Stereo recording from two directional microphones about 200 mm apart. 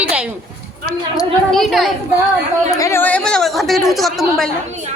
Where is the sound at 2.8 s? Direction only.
10° left (ahead or behind).